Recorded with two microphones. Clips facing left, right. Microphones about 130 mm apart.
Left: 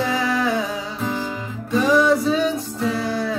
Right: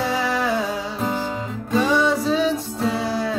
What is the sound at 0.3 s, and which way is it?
Music, 5° right (ahead or behind).